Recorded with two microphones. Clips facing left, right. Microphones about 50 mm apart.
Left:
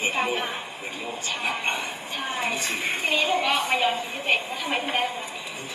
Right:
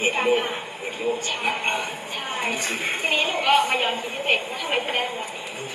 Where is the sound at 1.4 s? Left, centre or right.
Right.